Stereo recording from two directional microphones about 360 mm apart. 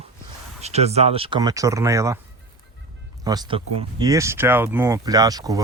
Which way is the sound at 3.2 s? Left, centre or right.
Centre.